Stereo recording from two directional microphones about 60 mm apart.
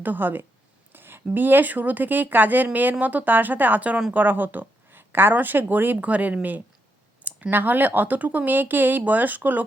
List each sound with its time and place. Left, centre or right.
0.0 s speech: right
7.3 s a sound: centre
7.5 s speech: right